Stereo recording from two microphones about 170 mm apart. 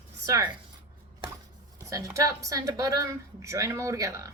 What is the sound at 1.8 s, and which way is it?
A woman's voice, 20° right (ahead or behind).